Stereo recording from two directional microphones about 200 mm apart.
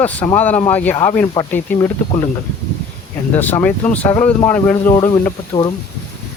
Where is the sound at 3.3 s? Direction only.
10° left (ahead or behind).